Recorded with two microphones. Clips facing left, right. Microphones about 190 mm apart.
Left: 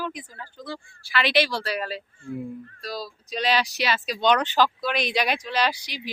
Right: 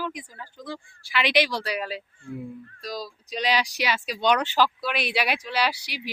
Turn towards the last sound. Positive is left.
turn(degrees=-10)  # may be behind; listen again after turning